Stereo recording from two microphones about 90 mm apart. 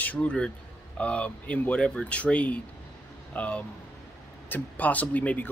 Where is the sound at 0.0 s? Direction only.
15° left (ahead or behind).